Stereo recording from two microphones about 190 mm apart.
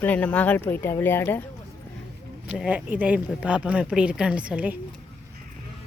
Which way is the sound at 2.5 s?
10° right (ahead or behind).